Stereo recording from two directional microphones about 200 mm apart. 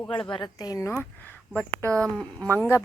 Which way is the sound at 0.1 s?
25° left (ahead or behind).